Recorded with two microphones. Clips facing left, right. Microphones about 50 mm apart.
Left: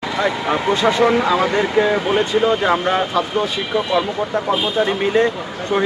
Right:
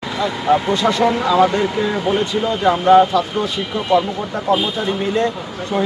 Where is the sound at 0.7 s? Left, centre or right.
Left.